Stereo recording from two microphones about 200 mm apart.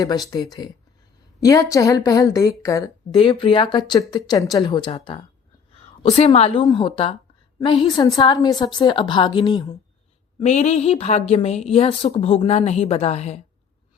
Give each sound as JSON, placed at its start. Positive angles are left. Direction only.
{"t": 0.3, "sound": "a woman's voice", "side_deg": 20}
{"t": 10.4, "sound": "a woman's voice", "side_deg": 35}